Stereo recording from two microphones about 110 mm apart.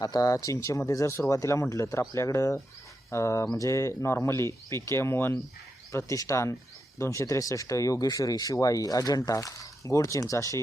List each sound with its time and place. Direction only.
0.0 s speech: 35° left (ahead or behind)